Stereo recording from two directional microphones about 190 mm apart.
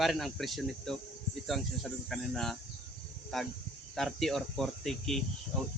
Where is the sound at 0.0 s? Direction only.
Centre (ahead or behind).